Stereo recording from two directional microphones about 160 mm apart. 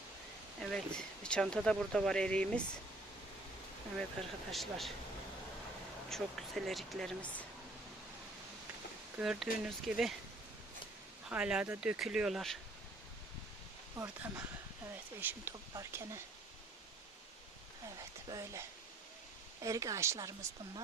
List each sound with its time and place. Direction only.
0.6 s speech: 5° left (ahead or behind)
4.2 s speech: 5° left (ahead or behind)
6.1 s speech: centre (ahead or behind)
9.1 s speech: 5° right (ahead or behind)
11.3 s speech: 5° right (ahead or behind)
13.9 s speech: 15° right (ahead or behind)
18.3 s speech: 20° right (ahead or behind)
19.6 s speech: 20° right (ahead or behind)